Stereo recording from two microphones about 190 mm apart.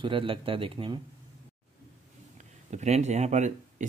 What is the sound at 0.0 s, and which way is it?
Speech, 25° right (ahead or behind).